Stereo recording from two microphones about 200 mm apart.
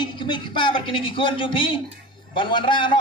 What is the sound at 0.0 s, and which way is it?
A man's voice, 25° left (ahead or behind).